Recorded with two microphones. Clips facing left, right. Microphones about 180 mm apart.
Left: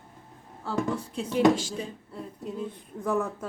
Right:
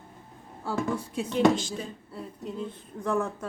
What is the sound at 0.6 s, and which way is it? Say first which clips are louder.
Speech: even; 10° right (ahead or behind).